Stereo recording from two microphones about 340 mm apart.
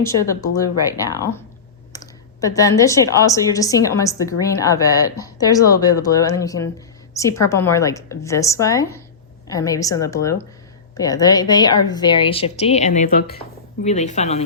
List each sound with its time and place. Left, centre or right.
0.0 s a woman's voice: centre
1.9 s clicking: centre
2.4 s a woman's voice: centre